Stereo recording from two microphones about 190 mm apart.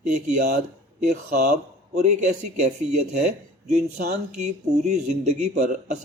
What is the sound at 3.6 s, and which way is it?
A man's voice, 40° right (ahead or behind).